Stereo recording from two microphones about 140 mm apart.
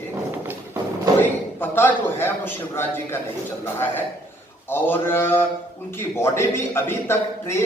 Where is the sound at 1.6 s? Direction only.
15° left (ahead or behind).